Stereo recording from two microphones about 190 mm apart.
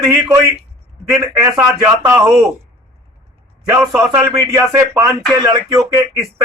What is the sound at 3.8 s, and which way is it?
A man's voice, 15° right (ahead or behind).